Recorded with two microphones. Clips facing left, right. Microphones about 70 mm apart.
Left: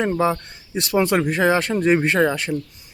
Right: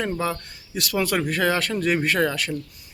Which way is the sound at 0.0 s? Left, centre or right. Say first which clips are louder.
Left 6 dB; left.